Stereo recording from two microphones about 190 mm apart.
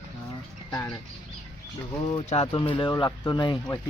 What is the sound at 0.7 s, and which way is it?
Bird, 10° left (ahead or behind).